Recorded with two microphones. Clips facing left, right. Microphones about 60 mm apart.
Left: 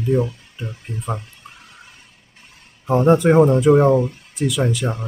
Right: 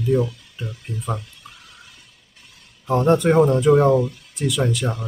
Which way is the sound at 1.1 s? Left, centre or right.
Left.